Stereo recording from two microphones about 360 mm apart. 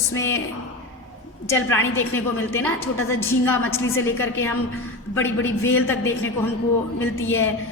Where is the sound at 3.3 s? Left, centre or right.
Centre.